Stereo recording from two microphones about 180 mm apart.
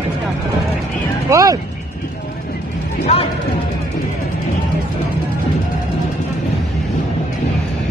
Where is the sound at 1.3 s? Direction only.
20° right (ahead or behind).